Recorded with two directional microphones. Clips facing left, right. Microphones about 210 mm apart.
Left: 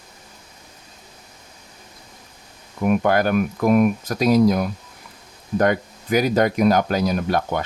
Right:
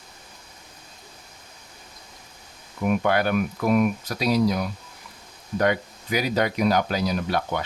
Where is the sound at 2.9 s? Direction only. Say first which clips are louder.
Left 4 dB; 45° left (ahead or behind).